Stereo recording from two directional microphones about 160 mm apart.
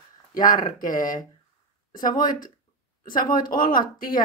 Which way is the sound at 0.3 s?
55° left (ahead or behind).